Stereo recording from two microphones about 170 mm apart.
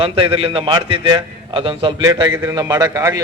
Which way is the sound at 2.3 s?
15° right (ahead or behind).